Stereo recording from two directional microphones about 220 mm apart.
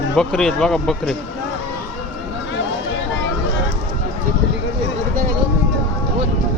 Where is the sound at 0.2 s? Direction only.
5° left (ahead or behind).